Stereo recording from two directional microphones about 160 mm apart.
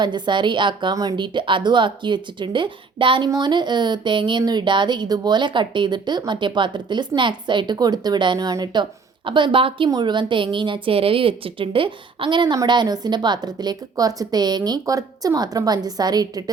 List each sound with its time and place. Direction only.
0.0 s a woman's voice: 30° right (ahead or behind)